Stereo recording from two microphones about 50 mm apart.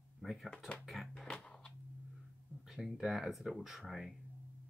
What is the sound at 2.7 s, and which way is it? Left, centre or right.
Speech, centre.